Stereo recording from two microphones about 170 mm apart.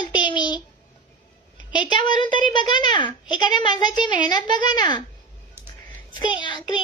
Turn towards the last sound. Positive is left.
turn(degrees=30)  # may be behind; listen again after turning